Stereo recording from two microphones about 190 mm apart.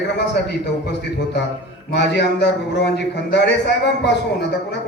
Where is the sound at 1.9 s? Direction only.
65° left (ahead or behind).